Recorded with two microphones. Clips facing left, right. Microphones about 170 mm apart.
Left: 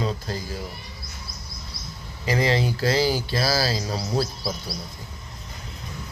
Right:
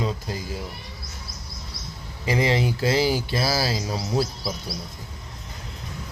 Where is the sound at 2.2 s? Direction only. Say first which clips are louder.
Even; 20° right (ahead or behind).